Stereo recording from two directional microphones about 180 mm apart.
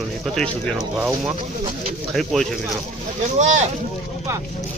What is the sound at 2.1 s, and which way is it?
Speech, centre (ahead or behind).